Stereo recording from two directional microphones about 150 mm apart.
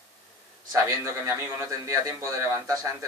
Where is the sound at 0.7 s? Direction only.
15° right (ahead or behind).